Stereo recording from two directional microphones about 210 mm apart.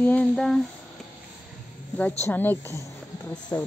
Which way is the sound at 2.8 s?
10° left (ahead or behind).